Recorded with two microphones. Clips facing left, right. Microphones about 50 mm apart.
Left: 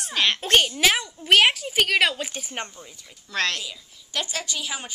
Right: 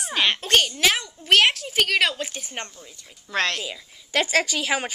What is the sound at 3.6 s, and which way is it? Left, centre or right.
A woman's voice, right.